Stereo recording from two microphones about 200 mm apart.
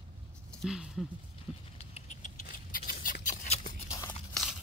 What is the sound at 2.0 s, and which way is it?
Patter, 35° left (ahead or behind).